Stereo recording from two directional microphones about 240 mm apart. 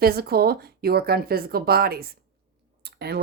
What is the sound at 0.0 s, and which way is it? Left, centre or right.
Speech, right.